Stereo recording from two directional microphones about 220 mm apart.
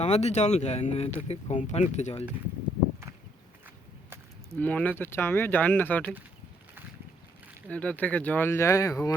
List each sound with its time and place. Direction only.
0.0 s speech: 30° left (ahead or behind)
4.6 s speech: 5° left (ahead or behind)
7.7 s speech: 5° left (ahead or behind)